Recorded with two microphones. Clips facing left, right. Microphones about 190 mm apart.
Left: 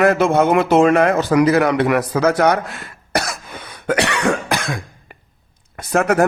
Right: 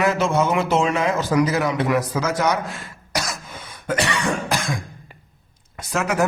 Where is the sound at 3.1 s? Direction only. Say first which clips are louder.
Left 5 dB; 65° left (ahead or behind).